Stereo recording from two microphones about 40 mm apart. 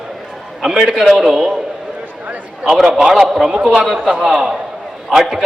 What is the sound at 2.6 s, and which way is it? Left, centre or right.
A man's voice, centre.